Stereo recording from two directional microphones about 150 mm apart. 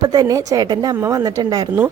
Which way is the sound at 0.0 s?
25° right (ahead or behind).